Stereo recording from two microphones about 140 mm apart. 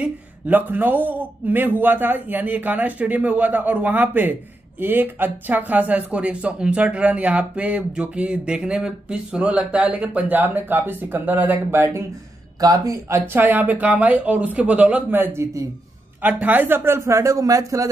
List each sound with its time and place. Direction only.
0.0 s a man's voice: 15° right (ahead or behind)